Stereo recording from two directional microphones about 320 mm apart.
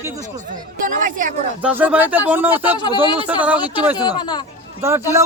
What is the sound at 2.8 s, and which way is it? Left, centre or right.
Speech, centre.